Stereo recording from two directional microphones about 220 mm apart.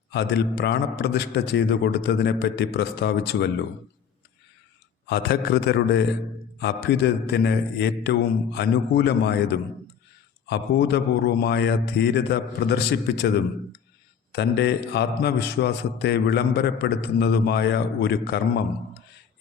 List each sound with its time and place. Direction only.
0.1 s a man's voice: 50° left (ahead or behind)
5.0 s a man's voice: 50° left (ahead or behind)
10.4 s a man's voice: 50° left (ahead or behind)